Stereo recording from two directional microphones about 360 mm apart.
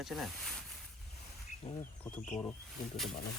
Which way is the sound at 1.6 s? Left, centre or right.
Centre.